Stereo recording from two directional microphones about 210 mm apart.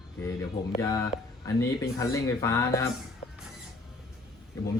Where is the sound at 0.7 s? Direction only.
15° left (ahead or behind).